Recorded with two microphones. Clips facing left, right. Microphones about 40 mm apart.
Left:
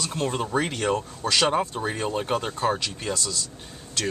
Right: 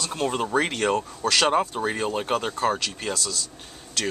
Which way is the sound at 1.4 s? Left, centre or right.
Centre.